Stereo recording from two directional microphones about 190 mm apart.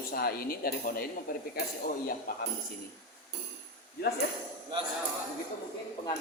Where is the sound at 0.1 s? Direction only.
55° left (ahead or behind).